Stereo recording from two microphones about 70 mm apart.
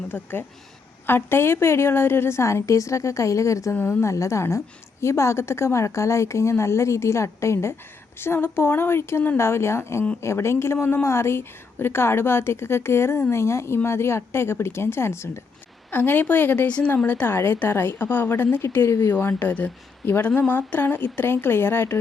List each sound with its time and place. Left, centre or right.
0.1 s a woman's voice: left
15.9 s a woman's voice: left
19.3 s a woman's voice: left